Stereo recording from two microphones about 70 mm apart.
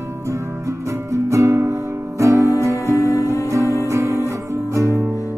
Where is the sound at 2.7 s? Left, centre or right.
Left.